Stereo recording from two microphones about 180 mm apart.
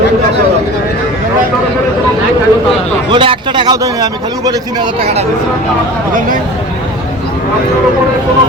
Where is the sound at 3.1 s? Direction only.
25° right (ahead or behind).